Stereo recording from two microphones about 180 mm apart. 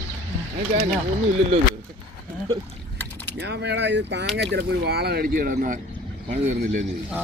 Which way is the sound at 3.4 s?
70° right (ahead or behind).